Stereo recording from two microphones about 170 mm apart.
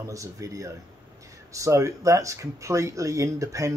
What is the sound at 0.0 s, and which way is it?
Speech, 20° right (ahead or behind).